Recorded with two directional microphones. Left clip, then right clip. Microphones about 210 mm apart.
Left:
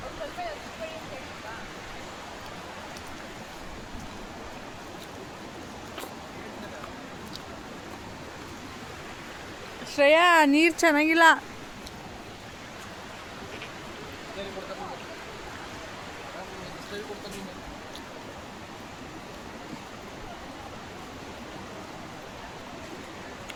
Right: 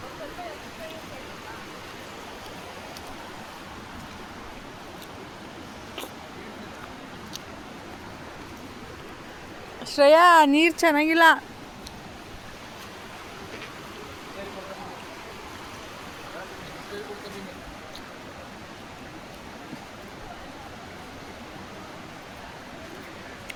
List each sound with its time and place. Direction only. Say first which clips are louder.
9.9 s speech: right 4 dB; 30° right (ahead or behind)
10.3 s speech: right 3 dB; 15° right (ahead or behind)